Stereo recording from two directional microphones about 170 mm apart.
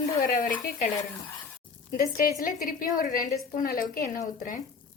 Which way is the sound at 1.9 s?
50° left (ahead or behind).